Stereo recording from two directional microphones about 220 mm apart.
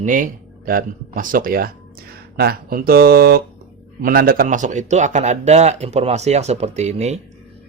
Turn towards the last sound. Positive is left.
turn(degrees=-30)  # may be behind; listen again after turning